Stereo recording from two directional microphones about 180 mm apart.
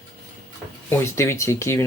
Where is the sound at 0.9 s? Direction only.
15° left (ahead or behind).